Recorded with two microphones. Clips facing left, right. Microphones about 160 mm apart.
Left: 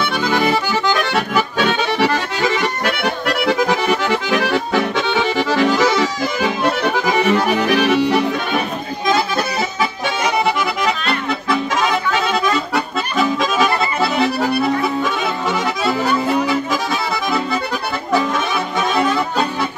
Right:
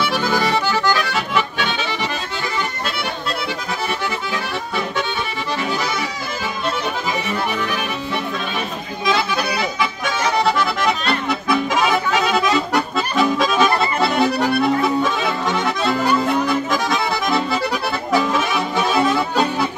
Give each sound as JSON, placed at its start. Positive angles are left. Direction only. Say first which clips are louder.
{"t": 1.7, "sound": "accordion", "louder": "left 7 dB", "side_deg": 65}
{"t": 11.8, "sound": "accordion", "louder": "even", "side_deg": -5}
{"t": 18.8, "sound": "music", "louder": "even", "side_deg": -5}